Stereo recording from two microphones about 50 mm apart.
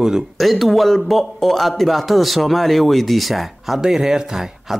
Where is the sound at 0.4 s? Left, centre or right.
Centre.